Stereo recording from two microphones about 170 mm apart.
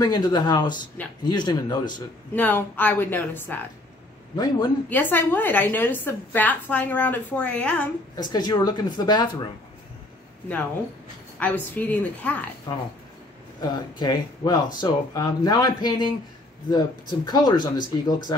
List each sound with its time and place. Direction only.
0.0 s speech: 25° left (ahead or behind)
1.0 s speech: 10° left (ahead or behind)
1.3 s speech: 25° left (ahead or behind)
2.3 s a woman's voice: 10° left (ahead or behind)
4.8 s a woman's voice: 10° left (ahead or behind)
8.2 s speech: 25° left (ahead or behind)
11.3 s a woman's voice: 10° left (ahead or behind)
12.7 s speech: 25° left (ahead or behind)